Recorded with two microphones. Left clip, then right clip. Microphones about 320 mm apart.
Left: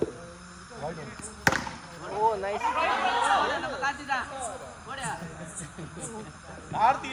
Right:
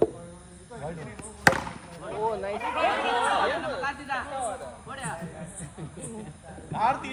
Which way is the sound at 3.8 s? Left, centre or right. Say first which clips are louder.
Left 1 dB; left.